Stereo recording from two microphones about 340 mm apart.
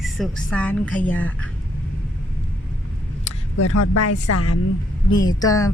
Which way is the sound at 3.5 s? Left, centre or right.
Left.